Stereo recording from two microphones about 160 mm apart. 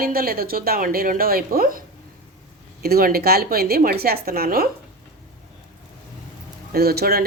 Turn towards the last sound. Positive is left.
turn(degrees=-75)  # may be behind; listen again after turning